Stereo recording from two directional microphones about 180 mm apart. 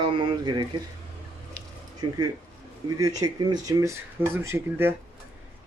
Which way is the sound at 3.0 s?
20° right (ahead or behind).